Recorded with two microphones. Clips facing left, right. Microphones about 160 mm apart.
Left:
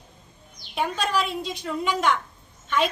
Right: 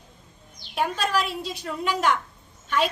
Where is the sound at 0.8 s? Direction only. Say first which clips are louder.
Even; 5° right (ahead or behind).